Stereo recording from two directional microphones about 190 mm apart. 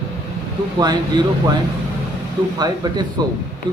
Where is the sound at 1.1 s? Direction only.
20° right (ahead or behind).